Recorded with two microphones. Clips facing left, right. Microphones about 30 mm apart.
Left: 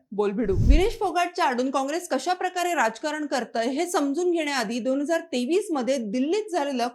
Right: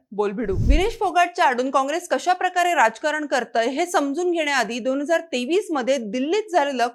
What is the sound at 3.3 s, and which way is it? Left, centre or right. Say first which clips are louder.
A woman's voice: right 3 dB; right.